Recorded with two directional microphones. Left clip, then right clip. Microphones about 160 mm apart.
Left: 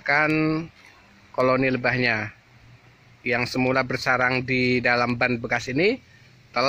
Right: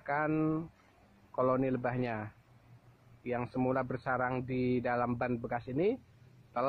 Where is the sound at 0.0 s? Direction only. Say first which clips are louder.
Left 11 dB; 20° left (ahead or behind).